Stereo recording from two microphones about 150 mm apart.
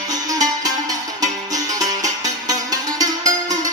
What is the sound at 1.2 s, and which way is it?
Music, 25° right (ahead or behind).